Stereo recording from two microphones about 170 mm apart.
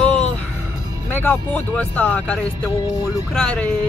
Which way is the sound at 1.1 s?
10° left (ahead or behind).